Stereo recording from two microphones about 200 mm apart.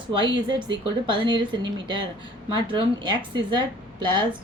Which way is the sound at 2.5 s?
25° right (ahead or behind).